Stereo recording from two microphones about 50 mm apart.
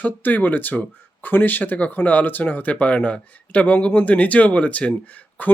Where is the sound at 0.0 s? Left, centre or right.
Left.